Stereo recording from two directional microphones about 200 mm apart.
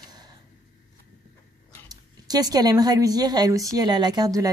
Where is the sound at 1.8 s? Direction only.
20° right (ahead or behind).